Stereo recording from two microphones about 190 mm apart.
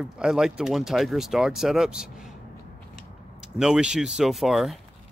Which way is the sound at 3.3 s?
5° right (ahead or behind).